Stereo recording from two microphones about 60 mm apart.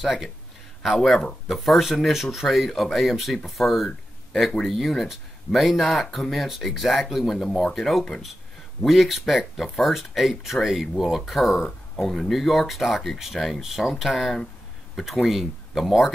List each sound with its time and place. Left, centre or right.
0.0 s speech: centre
12.0 s speech: centre